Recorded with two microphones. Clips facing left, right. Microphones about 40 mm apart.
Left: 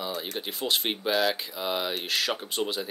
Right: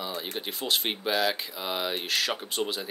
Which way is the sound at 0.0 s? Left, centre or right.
Centre.